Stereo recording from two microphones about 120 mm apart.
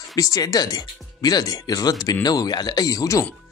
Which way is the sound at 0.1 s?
30° left (ahead or behind).